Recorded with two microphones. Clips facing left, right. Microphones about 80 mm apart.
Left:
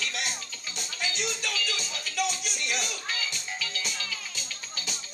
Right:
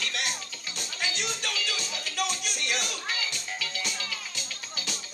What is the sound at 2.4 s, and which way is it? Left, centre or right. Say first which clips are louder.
Music: right 1 dB; right.